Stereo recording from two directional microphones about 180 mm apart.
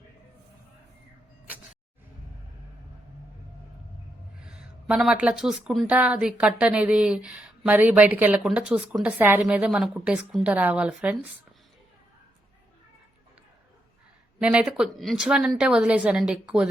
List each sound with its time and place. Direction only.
4.4 s speech: 5° right (ahead or behind)
14.4 s a woman's voice: 5° right (ahead or behind)